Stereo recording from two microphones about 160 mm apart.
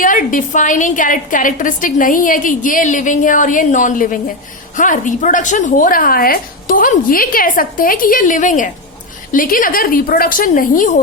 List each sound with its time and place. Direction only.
0.0 s a woman's voice: 55° left (ahead or behind)